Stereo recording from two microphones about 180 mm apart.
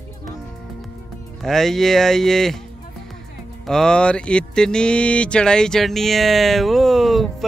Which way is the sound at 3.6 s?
5° left (ahead or behind).